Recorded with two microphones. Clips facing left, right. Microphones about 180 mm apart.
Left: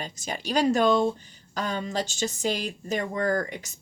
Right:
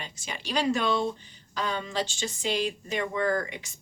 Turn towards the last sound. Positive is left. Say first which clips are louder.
# left 1 dB
turn(degrees=45)  # may be behind; listen again after turning